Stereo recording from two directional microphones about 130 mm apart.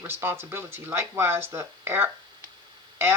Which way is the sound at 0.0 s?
15° right (ahead or behind).